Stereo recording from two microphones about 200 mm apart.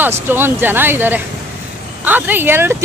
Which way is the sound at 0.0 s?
10° right (ahead or behind).